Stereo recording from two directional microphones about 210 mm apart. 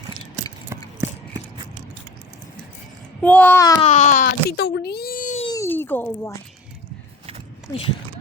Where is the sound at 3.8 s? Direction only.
35° left (ahead or behind).